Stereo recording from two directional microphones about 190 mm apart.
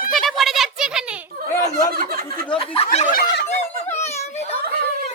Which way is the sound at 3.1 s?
55° left (ahead or behind).